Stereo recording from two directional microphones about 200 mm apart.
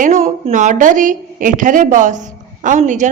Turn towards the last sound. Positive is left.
turn(degrees=-40)  # may be behind; listen again after turning